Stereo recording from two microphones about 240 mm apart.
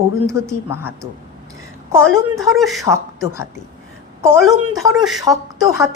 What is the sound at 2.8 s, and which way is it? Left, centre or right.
Speech, centre.